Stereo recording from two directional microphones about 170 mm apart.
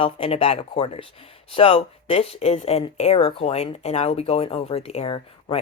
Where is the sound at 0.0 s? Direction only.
35° left (ahead or behind).